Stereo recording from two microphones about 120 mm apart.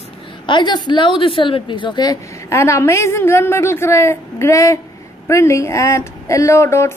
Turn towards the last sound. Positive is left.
turn(degrees=20)  # may be behind; listen again after turning